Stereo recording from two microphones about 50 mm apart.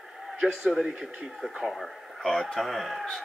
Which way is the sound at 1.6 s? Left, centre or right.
Centre.